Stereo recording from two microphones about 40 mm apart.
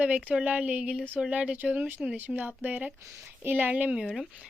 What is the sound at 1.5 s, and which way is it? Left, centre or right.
Speech, right.